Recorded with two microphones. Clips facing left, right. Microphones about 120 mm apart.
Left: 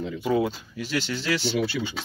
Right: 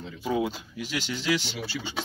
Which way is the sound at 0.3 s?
10° right (ahead or behind).